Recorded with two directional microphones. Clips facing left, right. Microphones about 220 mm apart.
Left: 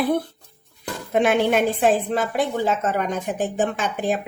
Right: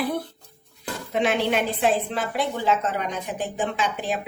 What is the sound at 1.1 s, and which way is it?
Speech, 50° left (ahead or behind).